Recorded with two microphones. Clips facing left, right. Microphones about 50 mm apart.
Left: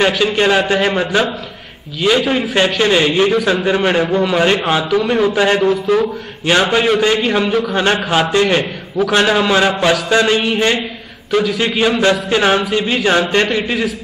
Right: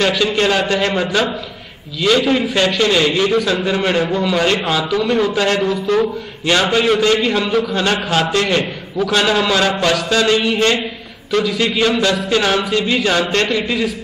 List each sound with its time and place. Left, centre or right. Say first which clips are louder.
0.0 s a man's voice: left 2 dB; centre
2.5 s speech: left 2 dB; left
4.9 s a man's voice: left 2 dB; centre
5.3 s a man's voice: left 3 dB; centre
13.5 s speech: left 1 dB; left